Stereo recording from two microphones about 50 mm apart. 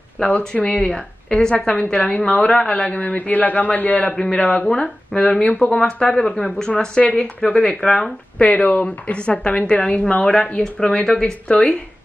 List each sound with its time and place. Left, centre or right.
0.2 s a woman's voice: centre
0.9 s a woman's voice: centre
3.0 s a man's voice: left
4.1 s a woman's voice: centre
8.4 s a woman's voice: left